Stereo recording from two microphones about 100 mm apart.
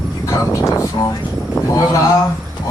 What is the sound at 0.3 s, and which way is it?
A man's voice, 35° left (ahead or behind).